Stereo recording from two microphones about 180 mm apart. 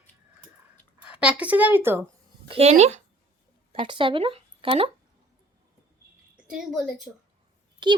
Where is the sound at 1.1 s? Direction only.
5° right (ahead or behind).